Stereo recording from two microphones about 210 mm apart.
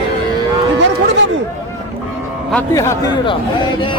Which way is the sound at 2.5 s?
10° left (ahead or behind).